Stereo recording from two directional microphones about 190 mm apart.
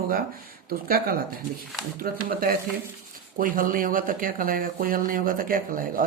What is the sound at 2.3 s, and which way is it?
Speech, 50° right (ahead or behind).